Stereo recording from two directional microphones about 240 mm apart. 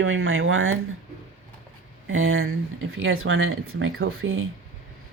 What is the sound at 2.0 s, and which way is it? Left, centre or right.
Speech, right.